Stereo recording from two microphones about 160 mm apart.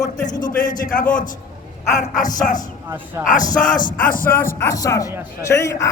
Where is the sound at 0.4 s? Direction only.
60° left (ahead or behind).